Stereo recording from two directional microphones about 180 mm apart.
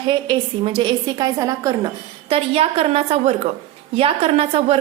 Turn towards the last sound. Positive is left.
turn(degrees=-35)  # may be behind; listen again after turning